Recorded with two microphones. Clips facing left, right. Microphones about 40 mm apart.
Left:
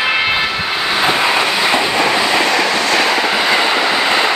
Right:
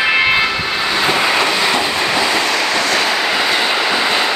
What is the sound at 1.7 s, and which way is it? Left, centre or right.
Train, centre.